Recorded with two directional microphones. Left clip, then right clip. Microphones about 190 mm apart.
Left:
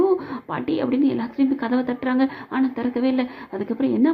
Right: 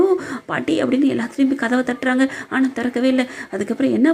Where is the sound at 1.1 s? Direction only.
20° right (ahead or behind).